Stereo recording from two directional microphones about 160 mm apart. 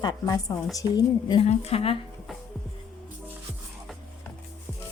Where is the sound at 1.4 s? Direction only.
40° left (ahead or behind).